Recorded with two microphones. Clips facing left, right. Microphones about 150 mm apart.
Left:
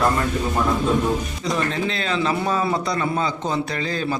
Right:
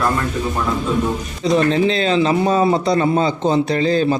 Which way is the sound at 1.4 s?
25° right (ahead or behind).